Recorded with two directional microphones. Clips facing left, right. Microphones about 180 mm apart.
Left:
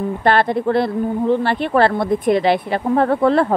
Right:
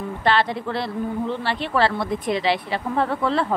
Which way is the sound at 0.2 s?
50° left (ahead or behind).